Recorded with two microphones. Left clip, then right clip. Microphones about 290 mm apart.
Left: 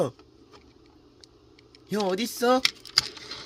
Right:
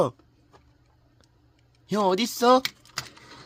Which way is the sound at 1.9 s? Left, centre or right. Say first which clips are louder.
Right 4 dB; centre.